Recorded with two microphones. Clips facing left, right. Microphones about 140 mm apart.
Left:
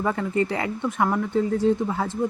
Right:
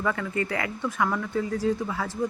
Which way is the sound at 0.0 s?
30° left (ahead or behind).